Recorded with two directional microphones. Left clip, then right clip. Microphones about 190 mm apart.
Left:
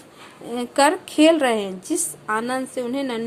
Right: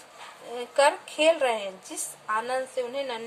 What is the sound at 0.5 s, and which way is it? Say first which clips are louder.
A woman's voice: left 4 dB; 45° left (ahead or behind).